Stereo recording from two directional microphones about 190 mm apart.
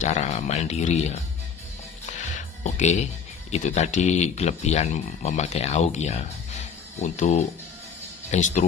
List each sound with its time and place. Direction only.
0.0 s speech: 40° left (ahead or behind)
2.6 s speech: 40° left (ahead or behind)